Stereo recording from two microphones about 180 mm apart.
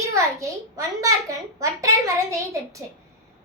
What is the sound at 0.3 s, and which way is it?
A child's voice, 15° right (ahead or behind).